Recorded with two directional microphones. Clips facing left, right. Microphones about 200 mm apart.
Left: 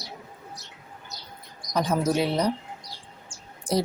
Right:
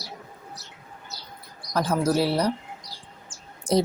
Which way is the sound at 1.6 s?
Centre (ahead or behind).